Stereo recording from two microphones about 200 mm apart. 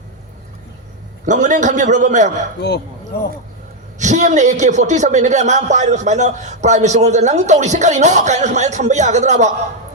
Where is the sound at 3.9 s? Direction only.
35° right (ahead or behind).